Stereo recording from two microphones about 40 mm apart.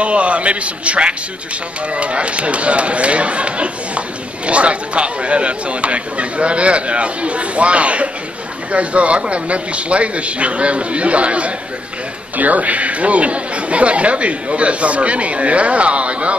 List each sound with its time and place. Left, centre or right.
0.0 s a man's voice: right